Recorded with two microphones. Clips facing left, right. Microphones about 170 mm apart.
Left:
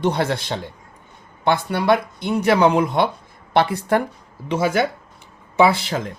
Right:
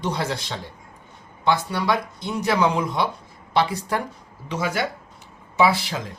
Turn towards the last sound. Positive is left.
turn(degrees=50)  # may be behind; listen again after turning